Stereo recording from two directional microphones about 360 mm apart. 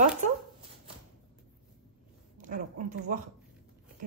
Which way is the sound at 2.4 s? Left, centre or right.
Right.